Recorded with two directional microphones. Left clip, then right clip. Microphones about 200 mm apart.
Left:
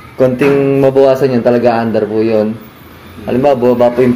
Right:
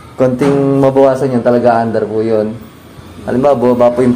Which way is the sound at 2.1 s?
5° right (ahead or behind).